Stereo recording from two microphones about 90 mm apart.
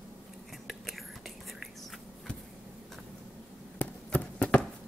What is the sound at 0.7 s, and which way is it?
Whispering, centre (ahead or behind).